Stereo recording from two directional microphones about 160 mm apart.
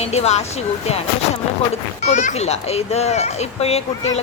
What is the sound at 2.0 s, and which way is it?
A child's voice, 45° left (ahead or behind).